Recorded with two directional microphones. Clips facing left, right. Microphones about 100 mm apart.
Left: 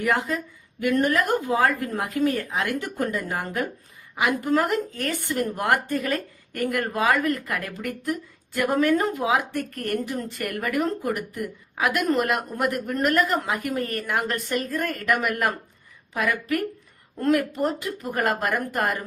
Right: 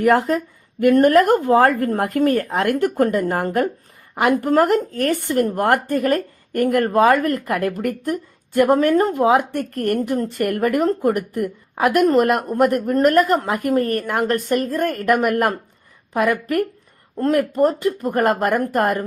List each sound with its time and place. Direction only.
0.0 s speech: 60° right (ahead or behind)
0.8 s speech: 50° right (ahead or behind)
10.4 s speech: 40° right (ahead or behind)
14.8 s speech: 35° right (ahead or behind)
17.2 s speech: 40° right (ahead or behind)